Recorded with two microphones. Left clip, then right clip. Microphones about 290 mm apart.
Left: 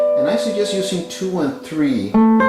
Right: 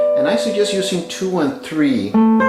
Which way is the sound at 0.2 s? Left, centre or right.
Centre.